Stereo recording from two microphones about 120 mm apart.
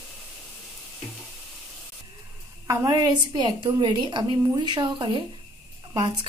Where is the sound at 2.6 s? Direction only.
35° right (ahead or behind).